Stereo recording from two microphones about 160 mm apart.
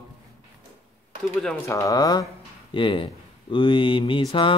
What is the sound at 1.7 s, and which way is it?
Speech, 20° left (ahead or behind).